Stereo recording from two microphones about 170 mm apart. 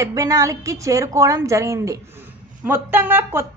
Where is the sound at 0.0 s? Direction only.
20° right (ahead or behind).